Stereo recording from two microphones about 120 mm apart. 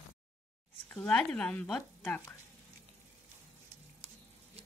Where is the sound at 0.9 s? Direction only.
10° left (ahead or behind).